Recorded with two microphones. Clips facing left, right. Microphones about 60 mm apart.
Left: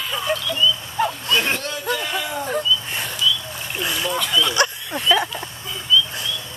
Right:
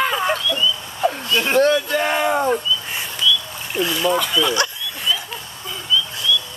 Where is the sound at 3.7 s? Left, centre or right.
Centre.